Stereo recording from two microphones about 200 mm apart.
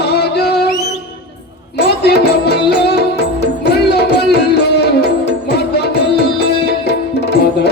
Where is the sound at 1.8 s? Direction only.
55° left (ahead or behind).